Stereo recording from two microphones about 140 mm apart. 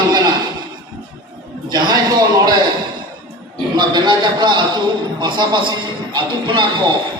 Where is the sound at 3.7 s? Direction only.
30° right (ahead or behind).